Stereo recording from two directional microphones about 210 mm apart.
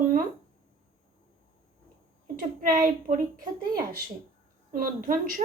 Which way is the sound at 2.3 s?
40° right (ahead or behind).